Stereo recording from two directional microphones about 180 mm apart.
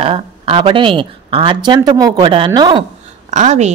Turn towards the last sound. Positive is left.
turn(degrees=-40)  # may be behind; listen again after turning